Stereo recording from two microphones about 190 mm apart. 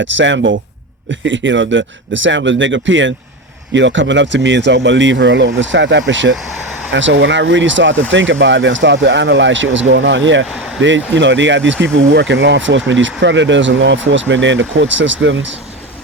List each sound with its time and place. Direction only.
0.0 s speech: 75° right (ahead or behind)